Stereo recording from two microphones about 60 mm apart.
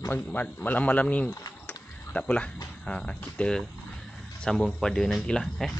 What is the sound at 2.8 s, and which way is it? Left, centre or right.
Speech, centre.